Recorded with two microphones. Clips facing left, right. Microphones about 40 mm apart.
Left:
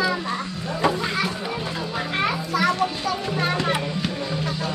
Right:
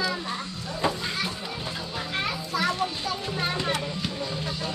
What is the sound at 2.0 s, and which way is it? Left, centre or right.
Children playing, left.